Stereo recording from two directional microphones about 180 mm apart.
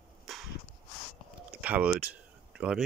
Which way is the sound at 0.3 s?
Centre (ahead or behind).